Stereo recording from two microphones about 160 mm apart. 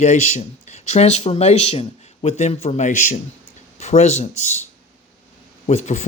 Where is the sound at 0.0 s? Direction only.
45° left (ahead or behind).